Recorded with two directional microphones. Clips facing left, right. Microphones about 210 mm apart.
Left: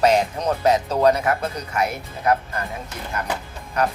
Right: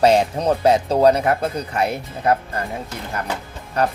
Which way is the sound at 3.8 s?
30° right (ahead or behind).